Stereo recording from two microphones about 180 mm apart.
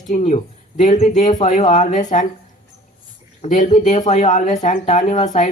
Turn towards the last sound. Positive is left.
turn(degrees=40)  # may be behind; listen again after turning